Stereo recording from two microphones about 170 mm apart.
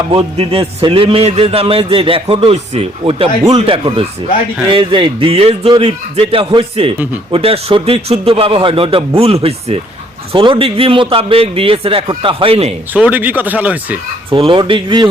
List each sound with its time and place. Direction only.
0.1 s a man's voice: 30° right (ahead or behind)
12.9 s speech: 10° right (ahead or behind)
14.3 s speech: 30° right (ahead or behind)